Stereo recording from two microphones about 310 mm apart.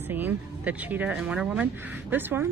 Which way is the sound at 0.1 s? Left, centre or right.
Centre.